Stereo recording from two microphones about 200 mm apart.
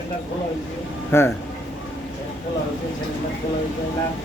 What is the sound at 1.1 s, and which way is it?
Speech, 15° left (ahead or behind).